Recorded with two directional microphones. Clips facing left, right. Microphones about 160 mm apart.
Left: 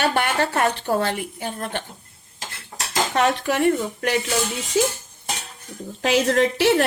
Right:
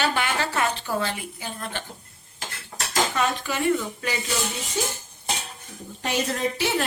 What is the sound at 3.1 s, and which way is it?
Speech, 65° left (ahead or behind).